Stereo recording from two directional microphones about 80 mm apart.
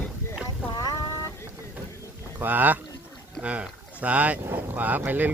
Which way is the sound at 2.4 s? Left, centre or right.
Right.